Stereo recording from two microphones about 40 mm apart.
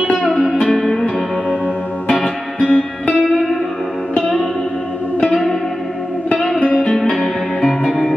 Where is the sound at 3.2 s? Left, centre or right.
Centre.